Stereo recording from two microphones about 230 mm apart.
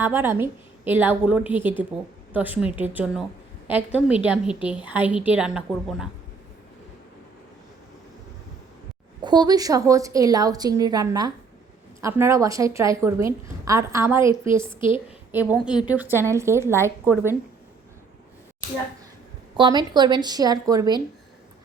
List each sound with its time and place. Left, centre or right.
0.0 s a woman's voice: centre
9.2 s a woman's voice: centre
19.5 s a woman's voice: centre